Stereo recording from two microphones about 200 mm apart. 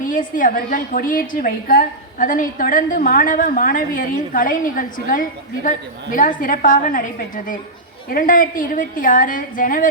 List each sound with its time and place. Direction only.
0.0 s a woman's voice: 40° left (ahead or behind)